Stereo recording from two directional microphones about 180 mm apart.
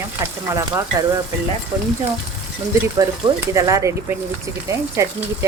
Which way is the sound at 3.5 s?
15° right (ahead or behind).